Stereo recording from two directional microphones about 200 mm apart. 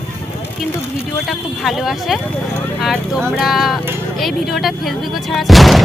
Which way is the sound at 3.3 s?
Centre (ahead or behind).